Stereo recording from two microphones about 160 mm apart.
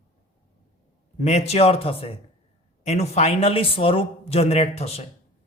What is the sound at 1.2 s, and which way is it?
Speech, 40° left (ahead or behind).